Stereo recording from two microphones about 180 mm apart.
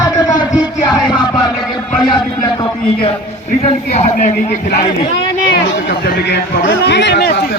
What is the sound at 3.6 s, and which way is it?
Speech, 40° left (ahead or behind).